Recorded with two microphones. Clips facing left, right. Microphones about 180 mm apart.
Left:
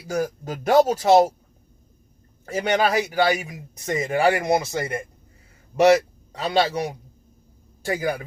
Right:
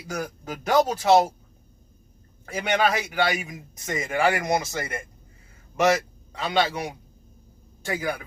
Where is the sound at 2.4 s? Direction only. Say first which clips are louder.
Left 2 dB; 40° left (ahead or behind).